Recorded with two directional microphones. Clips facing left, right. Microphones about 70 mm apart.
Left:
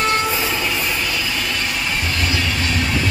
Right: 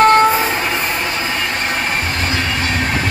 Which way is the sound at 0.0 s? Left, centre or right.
Right.